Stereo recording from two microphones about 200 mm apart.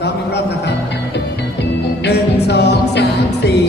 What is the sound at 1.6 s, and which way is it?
Music, 55° left (ahead or behind).